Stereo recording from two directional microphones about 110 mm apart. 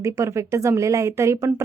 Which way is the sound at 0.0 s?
30° right (ahead or behind).